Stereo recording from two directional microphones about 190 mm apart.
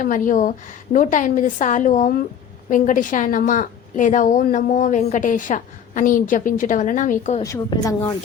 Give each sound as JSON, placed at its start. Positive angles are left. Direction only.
{"t": 0.0, "sound": "a woman's voice", "side_deg": 45}
{"t": 7.4, "sound": "a woman's voice", "side_deg": 15}